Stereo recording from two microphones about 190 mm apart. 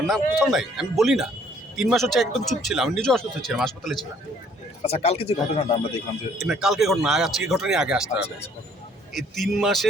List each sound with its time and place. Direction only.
0.1 s speech: centre (ahead or behind)
4.8 s speech: 30° left (ahead or behind)
6.3 s speech: centre (ahead or behind)